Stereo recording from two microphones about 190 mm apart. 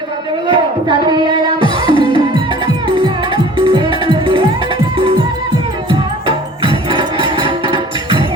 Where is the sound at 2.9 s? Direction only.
25° right (ahead or behind).